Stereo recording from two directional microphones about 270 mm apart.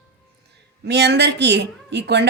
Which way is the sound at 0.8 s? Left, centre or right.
Right.